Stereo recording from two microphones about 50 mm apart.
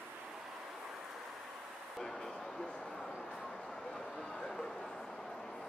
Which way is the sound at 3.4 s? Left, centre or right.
Centre.